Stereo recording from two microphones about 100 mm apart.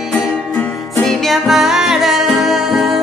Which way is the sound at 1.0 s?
Centre (ahead or behind).